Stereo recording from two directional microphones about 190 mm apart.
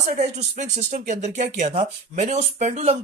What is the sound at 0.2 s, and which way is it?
Speech, 40° right (ahead or behind).